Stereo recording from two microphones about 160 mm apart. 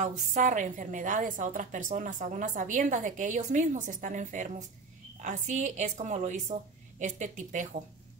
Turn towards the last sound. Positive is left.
turn(degrees=-50)  # may be behind; listen again after turning